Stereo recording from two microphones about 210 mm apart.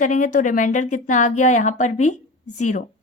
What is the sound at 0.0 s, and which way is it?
A woman's voice, 35° left (ahead or behind).